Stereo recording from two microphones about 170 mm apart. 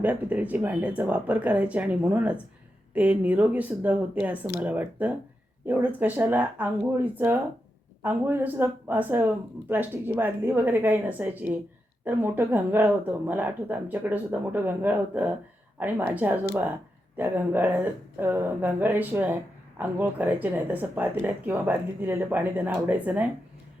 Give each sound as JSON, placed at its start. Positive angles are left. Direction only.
{"t": 0.0, "sound": "speech", "side_deg": -10}